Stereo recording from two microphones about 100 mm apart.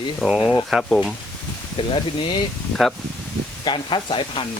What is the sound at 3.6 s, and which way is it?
Speech, 55° left (ahead or behind).